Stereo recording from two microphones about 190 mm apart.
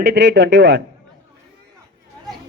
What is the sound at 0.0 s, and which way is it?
Speech, 60° right (ahead or behind).